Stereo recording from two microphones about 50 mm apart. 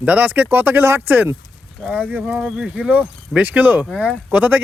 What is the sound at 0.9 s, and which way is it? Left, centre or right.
Speech, right.